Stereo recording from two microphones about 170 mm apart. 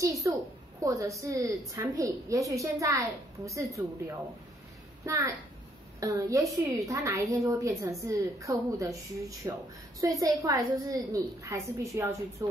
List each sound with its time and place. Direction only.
0.0 s a woman's voice: 20° right (ahead or behind)
5.0 s a child's voice: 20° right (ahead or behind)